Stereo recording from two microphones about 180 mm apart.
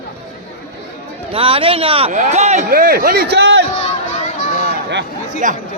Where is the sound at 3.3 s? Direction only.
70° right (ahead or behind).